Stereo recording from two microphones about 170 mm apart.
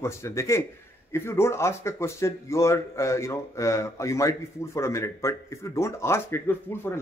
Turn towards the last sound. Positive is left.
turn(degrees=15)  # may be behind; listen again after turning